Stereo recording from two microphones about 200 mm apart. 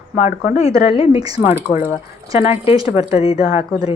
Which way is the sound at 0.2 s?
35° left (ahead or behind).